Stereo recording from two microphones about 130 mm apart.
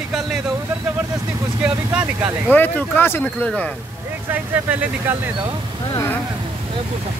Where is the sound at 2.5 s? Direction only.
15° left (ahead or behind).